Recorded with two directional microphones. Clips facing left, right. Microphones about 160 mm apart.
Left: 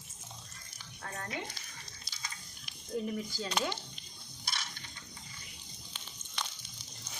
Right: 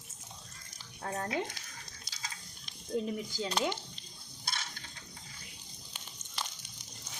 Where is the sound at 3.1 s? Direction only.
20° right (ahead or behind).